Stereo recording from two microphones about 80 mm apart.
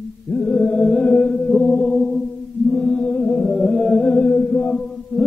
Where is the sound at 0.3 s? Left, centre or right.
Centre.